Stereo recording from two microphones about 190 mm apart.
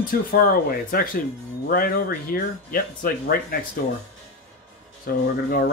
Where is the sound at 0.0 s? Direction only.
50° left (ahead or behind).